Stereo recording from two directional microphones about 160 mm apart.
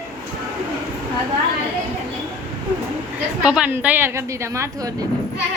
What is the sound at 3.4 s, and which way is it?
A woman's voice, 5° right (ahead or behind).